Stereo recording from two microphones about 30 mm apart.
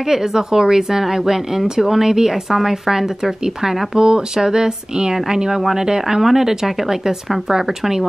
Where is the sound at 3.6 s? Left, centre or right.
Right.